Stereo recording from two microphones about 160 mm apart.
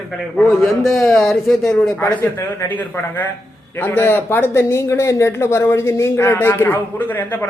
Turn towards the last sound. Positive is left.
turn(degrees=10)  # may be behind; listen again after turning